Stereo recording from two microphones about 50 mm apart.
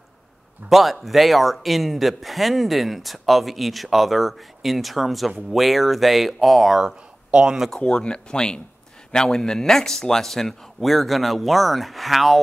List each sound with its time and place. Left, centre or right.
0.7 s speech: centre
7.2 s speech: right
7.7 s speech: centre